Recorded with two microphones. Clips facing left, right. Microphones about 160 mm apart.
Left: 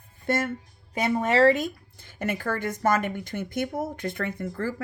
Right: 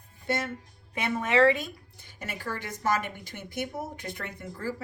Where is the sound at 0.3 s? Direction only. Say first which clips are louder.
Left 4 dB; 50° left (ahead or behind).